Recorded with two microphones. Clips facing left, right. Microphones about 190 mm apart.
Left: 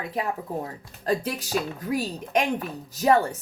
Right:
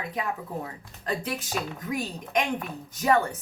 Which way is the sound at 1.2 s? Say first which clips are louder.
Left 3 dB; 40° left (ahead or behind).